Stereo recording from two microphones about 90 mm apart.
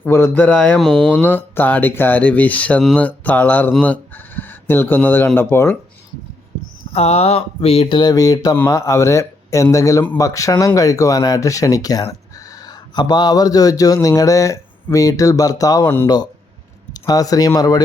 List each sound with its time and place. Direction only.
0.0 s a sound: 20° left (ahead or behind)
0.8 s speech: 5° left (ahead or behind); by 5.7 s 25° left (ahead or behind)
6.8 s a sound: 90° left
7.6 s speech: 65° left (ahead or behind)
8.1 s speech: 45° left (ahead or behind)
8.7 s speech: 35° left (ahead or behind)